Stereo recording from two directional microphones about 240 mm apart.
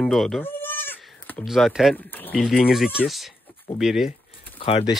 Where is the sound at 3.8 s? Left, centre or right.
Centre.